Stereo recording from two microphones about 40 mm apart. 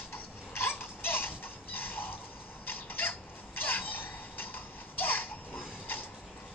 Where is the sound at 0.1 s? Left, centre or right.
Left.